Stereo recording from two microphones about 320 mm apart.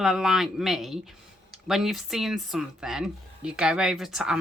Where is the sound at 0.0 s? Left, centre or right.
Centre.